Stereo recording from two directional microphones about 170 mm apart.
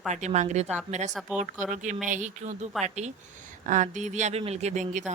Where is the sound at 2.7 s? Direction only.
Centre (ahead or behind).